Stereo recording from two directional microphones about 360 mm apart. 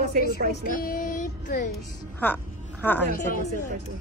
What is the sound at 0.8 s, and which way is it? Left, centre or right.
Child singing, left.